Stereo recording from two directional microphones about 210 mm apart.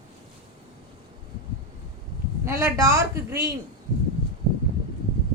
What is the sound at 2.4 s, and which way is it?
A man's voice, 10° right (ahead or behind).